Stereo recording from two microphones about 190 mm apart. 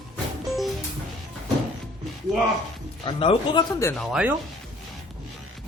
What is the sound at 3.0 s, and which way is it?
Speech, 25° left (ahead or behind).